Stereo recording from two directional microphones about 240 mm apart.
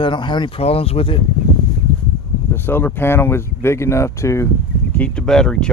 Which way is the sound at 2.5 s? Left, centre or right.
Centre.